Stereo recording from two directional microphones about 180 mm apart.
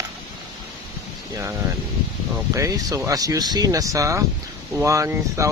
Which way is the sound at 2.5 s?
20° right (ahead or behind).